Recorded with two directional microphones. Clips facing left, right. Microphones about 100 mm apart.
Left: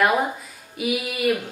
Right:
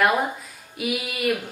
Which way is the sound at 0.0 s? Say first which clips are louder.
Left 1 dB; centre (ahead or behind).